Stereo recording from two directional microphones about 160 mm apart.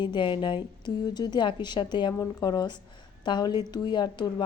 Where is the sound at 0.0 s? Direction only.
30° left (ahead or behind).